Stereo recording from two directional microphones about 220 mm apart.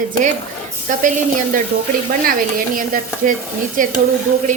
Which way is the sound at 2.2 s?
40° right (ahead or behind).